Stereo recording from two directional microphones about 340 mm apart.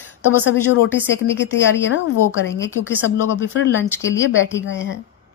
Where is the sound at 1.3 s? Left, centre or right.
Centre.